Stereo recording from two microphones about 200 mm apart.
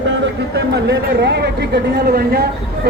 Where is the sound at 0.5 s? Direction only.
55° right (ahead or behind).